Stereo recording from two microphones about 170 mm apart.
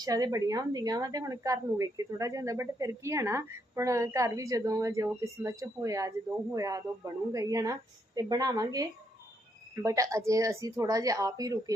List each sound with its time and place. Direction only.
0.0 s a woman's voice: 20° right (ahead or behind)